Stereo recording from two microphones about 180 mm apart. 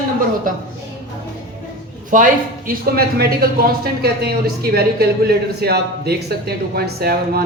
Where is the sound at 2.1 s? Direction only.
50° right (ahead or behind).